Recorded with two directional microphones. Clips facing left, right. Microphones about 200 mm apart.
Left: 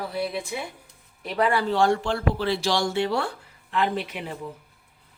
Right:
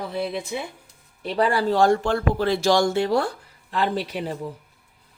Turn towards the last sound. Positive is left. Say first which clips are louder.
# right 3 dB
turn(degrees=-35)  # may be behind; listen again after turning